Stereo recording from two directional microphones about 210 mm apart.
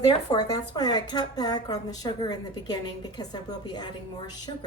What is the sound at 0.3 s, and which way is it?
A woman's voice, 20° left (ahead or behind).